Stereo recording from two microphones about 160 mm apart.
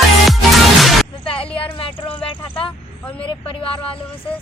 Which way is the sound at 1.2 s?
35° left (ahead or behind).